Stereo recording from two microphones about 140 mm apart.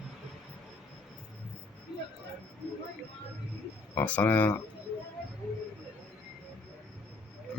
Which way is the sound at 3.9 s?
10° left (ahead or behind).